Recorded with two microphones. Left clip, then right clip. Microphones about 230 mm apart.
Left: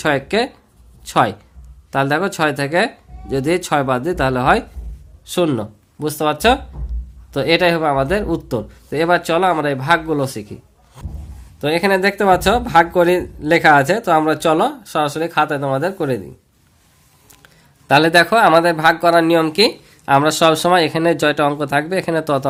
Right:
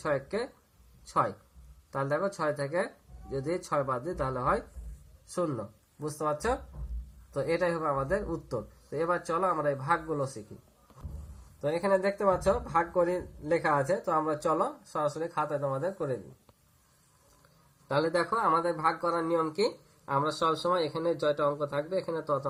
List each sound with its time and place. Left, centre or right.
0.1 s speech: left
11.6 s speech: left
17.8 s speech: left